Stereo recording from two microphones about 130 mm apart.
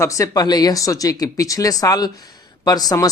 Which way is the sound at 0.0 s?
25° left (ahead or behind).